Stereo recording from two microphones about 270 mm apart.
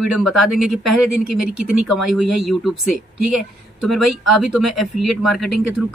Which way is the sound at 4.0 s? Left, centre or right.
Right.